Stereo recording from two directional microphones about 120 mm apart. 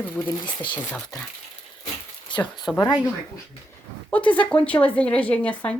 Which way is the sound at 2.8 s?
35° left (ahead or behind).